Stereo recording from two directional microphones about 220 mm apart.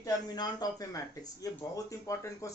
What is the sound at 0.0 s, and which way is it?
Speech, 20° left (ahead or behind).